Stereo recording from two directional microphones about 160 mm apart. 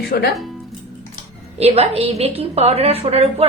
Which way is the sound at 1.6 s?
40° right (ahead or behind).